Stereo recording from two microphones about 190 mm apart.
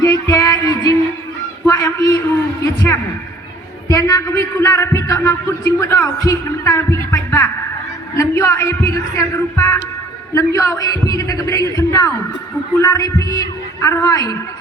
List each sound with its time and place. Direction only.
0.0 s music: 20° left (ahead or behind)
1.6 s a sound: 15° left (ahead or behind)
2.6 s a man's voice: 15° left (ahead or behind)